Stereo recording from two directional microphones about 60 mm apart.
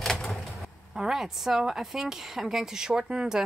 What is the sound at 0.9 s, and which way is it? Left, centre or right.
Speech, centre.